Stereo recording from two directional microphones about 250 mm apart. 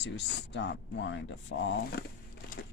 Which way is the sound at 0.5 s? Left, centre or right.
Left.